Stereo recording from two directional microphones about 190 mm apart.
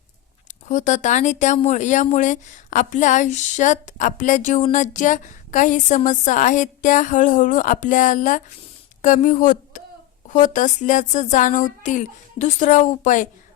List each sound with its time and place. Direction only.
0.7 s a woman's voice: 40° left (ahead or behind)